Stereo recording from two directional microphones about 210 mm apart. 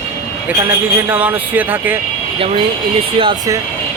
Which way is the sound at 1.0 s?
10° right (ahead or behind).